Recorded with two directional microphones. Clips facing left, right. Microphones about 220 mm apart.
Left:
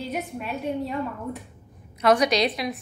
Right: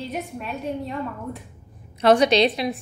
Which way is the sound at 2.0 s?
30° right (ahead or behind).